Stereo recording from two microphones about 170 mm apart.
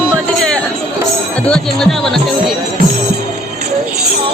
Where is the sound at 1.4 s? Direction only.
5° left (ahead or behind).